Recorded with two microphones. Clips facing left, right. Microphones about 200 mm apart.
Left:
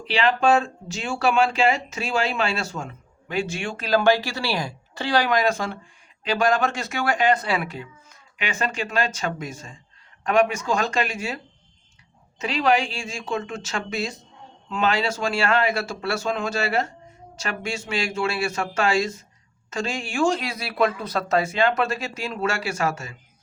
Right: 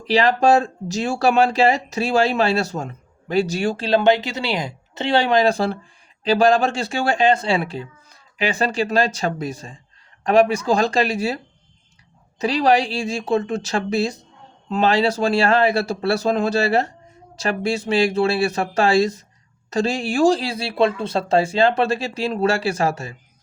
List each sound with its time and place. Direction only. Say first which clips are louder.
0.1 s speech: right 4 dB; 40° right (ahead or behind)
12.4 s speech: right 4 dB; 35° right (ahead or behind)